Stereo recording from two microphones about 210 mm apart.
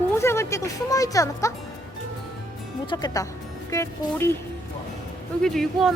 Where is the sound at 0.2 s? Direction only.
15° left (ahead or behind).